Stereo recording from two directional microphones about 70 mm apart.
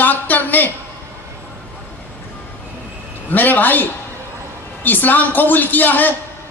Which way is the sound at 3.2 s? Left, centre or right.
Left.